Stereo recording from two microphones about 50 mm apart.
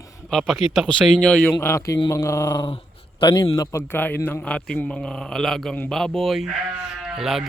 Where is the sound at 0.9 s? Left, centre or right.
Centre.